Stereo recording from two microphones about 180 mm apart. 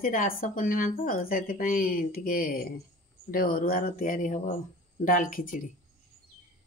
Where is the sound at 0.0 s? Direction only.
50° left (ahead or behind).